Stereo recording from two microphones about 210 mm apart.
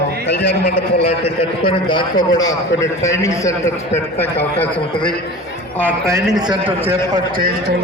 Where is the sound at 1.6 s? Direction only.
25° left (ahead or behind).